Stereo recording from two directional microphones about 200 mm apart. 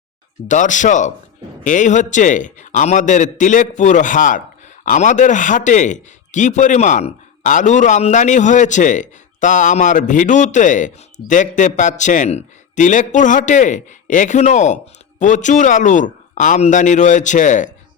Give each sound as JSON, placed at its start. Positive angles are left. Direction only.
{"t": 0.4, "sound": "a man's voice", "side_deg": 40}